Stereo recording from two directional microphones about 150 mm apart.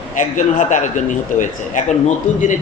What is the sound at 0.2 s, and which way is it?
A man's voice, 55° left (ahead or behind).